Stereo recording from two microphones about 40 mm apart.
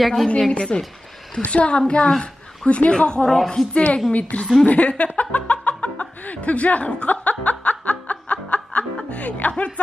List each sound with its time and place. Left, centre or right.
0.0 s a woman's voice: centre
0.5 s a woman's voice: left
1.8 s a woman's voice: left
4.6 s chuckle: left